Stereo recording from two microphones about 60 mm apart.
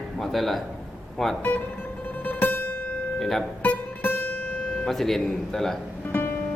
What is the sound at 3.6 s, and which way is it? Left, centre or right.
Music, left.